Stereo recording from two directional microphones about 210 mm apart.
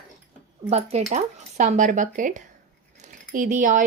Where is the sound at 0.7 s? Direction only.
30° right (ahead or behind).